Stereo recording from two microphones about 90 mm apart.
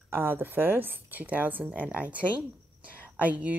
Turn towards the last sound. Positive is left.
turn(degrees=-15)  # may be behind; listen again after turning